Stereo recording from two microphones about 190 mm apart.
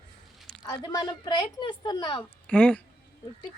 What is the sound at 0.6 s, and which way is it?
Speech, 20° left (ahead or behind).